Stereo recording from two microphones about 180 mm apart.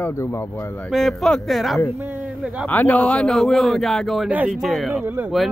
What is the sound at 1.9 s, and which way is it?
Speech, 10° right (ahead or behind).